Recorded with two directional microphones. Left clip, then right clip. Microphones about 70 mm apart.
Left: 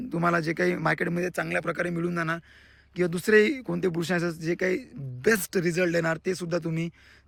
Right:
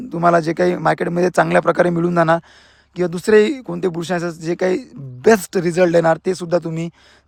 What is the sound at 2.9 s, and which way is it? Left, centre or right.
Speech, right.